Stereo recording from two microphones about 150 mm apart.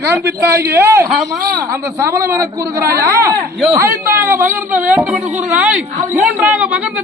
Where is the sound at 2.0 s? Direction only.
20° right (ahead or behind).